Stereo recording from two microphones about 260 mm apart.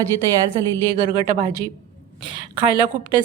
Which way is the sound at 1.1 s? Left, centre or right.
Centre.